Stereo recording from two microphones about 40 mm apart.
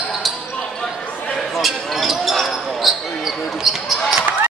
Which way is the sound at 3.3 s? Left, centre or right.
Centre.